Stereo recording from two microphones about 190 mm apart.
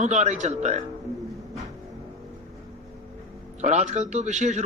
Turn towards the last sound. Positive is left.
turn(degrees=-40)  # may be behind; listen again after turning